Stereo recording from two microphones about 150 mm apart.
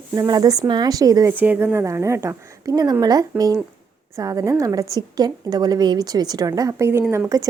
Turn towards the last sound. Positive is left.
turn(degrees=-25)  # may be behind; listen again after turning